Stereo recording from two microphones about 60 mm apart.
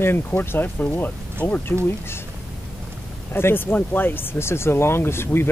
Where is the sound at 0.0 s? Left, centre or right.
Left.